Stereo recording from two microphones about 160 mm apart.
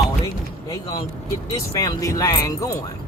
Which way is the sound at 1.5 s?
20° left (ahead or behind).